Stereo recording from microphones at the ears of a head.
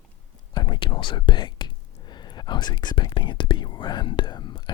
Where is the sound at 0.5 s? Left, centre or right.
Left.